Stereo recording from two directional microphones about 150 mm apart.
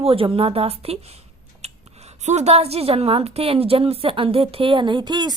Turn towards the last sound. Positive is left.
turn(degrees=-30)  # may be behind; listen again after turning